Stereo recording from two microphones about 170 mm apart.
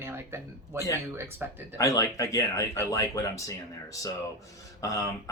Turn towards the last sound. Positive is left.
turn(degrees=20)  # may be behind; listen again after turning